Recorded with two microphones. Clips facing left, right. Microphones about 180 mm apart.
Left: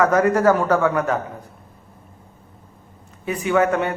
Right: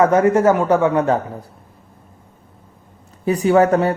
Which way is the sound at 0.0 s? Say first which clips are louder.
Right 3 dB; 25° right (ahead or behind).